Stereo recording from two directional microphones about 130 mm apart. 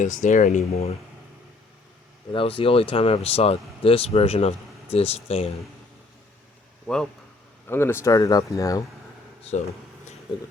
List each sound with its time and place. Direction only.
0.0 s speech: 75° left (ahead or behind); by 0.9 s 55° left (ahead or behind)
2.3 s speech: 45° left (ahead or behind)
6.8 s speech: 5° left (ahead or behind)
7.7 s speech: 15° left (ahead or behind)